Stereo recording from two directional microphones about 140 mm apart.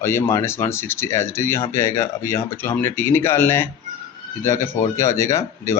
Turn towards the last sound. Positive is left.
turn(degrees=20)  # may be behind; listen again after turning